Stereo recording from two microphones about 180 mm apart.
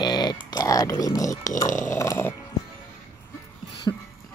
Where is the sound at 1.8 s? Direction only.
15° left (ahead or behind).